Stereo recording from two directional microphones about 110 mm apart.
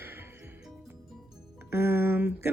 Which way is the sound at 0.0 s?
20° right (ahead or behind).